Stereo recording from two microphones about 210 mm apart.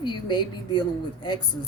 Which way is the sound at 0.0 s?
20° left (ahead or behind).